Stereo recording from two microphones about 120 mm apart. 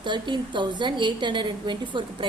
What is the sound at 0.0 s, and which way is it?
A woman's voice, 40° right (ahead or behind).